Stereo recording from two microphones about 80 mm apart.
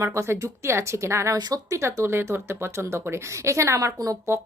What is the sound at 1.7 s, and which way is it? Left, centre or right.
A woman's voice, right.